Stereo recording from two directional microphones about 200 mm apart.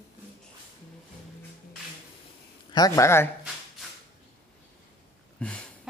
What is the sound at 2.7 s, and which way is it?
Speech, 15° left (ahead or behind).